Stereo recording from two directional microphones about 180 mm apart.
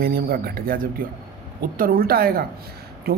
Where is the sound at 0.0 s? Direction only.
60° right (ahead or behind).